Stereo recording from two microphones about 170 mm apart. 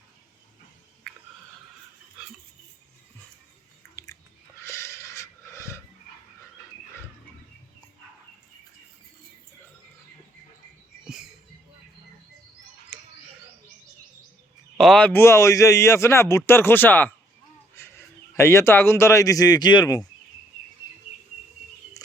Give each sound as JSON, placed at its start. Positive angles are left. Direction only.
{"t": 4.0, "sound": "chewing", "side_deg": 20}
{"t": 4.6, "sound": "a sound", "side_deg": 15}
{"t": 14.8, "sound": "a man's voice", "side_deg": 5}